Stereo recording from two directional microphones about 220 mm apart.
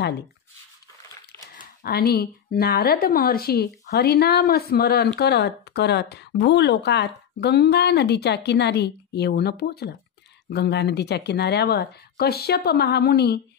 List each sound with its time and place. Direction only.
1.8 s a woman's voice: 45° left (ahead or behind)